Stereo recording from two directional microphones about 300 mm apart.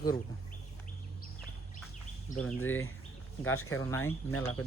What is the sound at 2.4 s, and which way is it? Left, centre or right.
Speech, centre.